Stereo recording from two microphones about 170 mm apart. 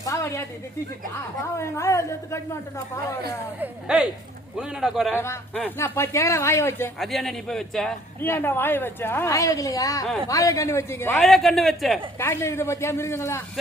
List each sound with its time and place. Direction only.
0.0 s a sound: 20° left (ahead or behind)
1.5 s a woman's voice: 15° left (ahead or behind)
3.6 s a man's voice: 5° right (ahead or behind)
5.1 s a woman's voice: 15° left (ahead or behind)
7.0 s a man's voice: centre (ahead or behind)
11.2 s a man's voice: centre (ahead or behind)
12.2 s a woman's voice: 15° left (ahead or behind)